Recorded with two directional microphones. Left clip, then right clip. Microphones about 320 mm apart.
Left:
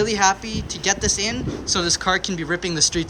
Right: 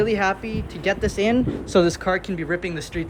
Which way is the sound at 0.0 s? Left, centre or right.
Centre.